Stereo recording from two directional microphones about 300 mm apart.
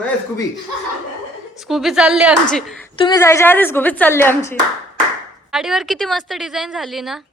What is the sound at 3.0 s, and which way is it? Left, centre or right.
A woman's voice, centre.